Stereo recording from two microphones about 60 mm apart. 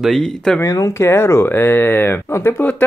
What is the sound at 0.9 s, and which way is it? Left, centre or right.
Speech, left.